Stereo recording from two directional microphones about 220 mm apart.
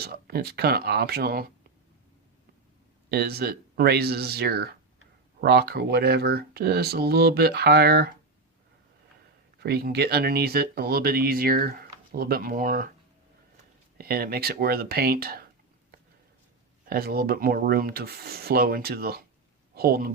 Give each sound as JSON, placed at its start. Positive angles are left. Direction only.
{"t": 0.0, "sound": "speech", "side_deg": -45}
{"t": 3.1, "sound": "speech", "side_deg": -45}
{"t": 9.6, "sound": "speech", "side_deg": -45}
{"t": 14.0, "sound": "speech", "side_deg": -45}
{"t": 16.9, "sound": "speech", "side_deg": -45}